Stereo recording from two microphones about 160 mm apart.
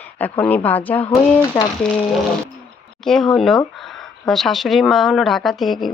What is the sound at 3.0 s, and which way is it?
Speech, 5° left (ahead or behind).